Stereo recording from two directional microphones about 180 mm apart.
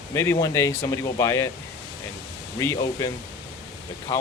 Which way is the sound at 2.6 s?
15° left (ahead or behind).